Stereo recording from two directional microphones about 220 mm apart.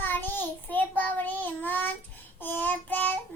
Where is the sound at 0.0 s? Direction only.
10° left (ahead or behind).